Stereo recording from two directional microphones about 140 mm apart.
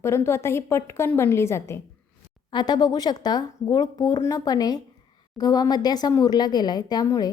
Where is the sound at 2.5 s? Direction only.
30° left (ahead or behind).